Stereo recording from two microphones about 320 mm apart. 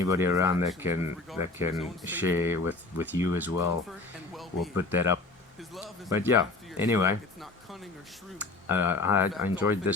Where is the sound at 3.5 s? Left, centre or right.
Left.